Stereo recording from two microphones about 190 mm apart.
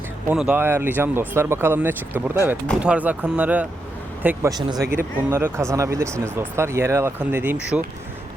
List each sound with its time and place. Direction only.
0.3 s speech: 5° right (ahead or behind)